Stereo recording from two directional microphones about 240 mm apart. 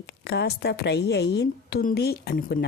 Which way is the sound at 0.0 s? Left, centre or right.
Left.